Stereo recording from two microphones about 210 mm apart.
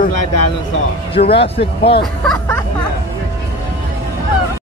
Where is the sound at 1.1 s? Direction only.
25° left (ahead or behind).